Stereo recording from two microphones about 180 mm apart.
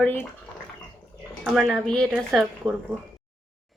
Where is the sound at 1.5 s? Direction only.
Centre (ahead or behind).